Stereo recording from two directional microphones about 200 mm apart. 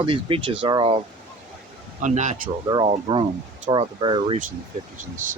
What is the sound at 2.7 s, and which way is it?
Speech, 20° right (ahead or behind).